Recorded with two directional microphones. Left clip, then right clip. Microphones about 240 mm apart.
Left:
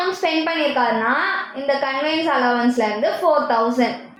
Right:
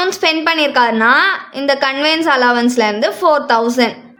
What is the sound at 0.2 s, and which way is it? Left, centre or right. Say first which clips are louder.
A woman's voice: right 6 dB; right.